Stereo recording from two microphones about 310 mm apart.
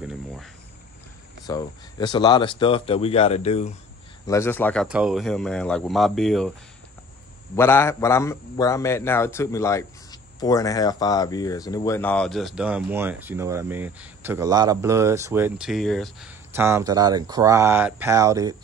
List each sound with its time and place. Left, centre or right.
0.0 s cricket: centre
1.4 s speech: centre
4.3 s a man's voice: centre
7.5 s a man's voice: centre